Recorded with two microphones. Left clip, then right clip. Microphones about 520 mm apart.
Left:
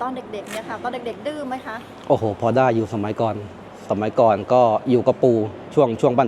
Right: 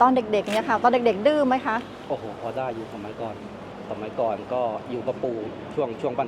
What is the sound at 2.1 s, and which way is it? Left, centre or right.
Speech, left.